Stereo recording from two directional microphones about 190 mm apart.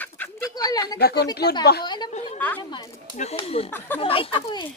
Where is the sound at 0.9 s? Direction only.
55° left (ahead or behind).